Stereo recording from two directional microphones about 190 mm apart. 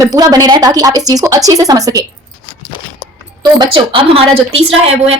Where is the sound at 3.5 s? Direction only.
25° right (ahead or behind).